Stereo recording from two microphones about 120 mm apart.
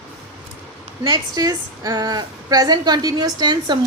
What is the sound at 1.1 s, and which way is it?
A woman's voice, 35° right (ahead or behind).